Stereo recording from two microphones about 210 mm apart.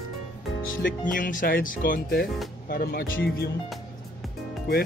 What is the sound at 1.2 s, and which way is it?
Speech, 40° left (ahead or behind).